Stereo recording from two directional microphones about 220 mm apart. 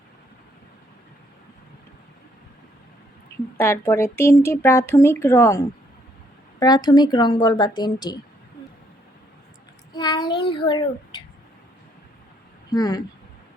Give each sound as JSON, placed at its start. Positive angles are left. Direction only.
{"t": 3.6, "sound": "speech", "side_deg": 10}
{"t": 9.9, "sound": "speech", "side_deg": 20}
{"t": 12.7, "sound": "speech", "side_deg": 15}